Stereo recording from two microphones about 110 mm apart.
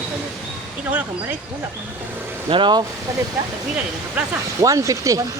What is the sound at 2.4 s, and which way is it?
Speech, 50° right (ahead or behind).